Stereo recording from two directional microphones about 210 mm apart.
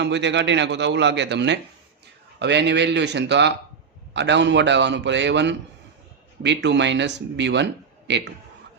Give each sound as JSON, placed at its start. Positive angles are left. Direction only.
{"t": 0.0, "sound": "speech", "side_deg": -55}